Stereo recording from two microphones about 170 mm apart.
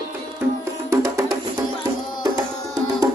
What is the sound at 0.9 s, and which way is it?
Music, 15° right (ahead or behind).